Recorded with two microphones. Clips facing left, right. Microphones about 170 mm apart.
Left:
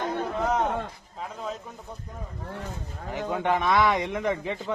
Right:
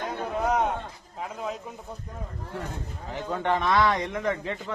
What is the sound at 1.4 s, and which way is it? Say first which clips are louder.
Speech: right 1 dB; 5° right (ahead or behind).